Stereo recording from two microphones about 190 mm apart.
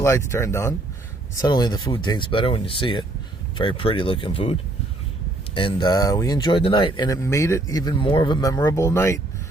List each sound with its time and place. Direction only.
0.0 s speech: 15° left (ahead or behind)
5.5 s speech: 25° left (ahead or behind)